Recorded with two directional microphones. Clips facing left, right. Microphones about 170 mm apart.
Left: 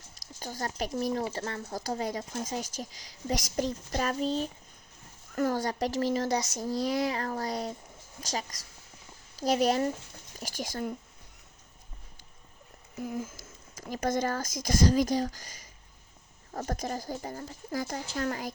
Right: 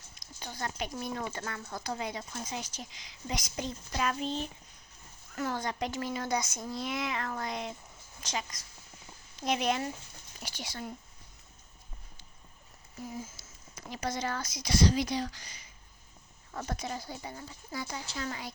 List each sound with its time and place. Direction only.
0.1 s a sound: 40° left (ahead or behind)
0.9 s speech: 35° left (ahead or behind)
13.0 s speech: 55° left (ahead or behind)